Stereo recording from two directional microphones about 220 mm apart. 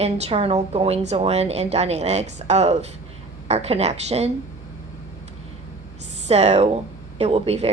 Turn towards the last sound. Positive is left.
turn(degrees=-30)  # may be behind; listen again after turning